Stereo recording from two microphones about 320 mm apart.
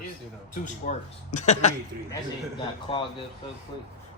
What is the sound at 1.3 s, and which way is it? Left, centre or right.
Speech, left.